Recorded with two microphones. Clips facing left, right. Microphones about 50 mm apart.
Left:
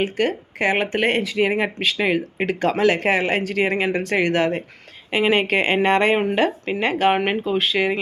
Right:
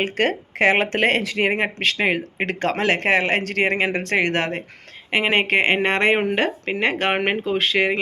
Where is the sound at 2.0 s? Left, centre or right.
Right.